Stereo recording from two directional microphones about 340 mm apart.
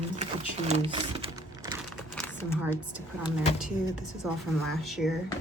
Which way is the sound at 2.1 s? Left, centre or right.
Centre.